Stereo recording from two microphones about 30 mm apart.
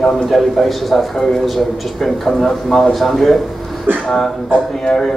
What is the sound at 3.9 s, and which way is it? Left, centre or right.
Speech, right.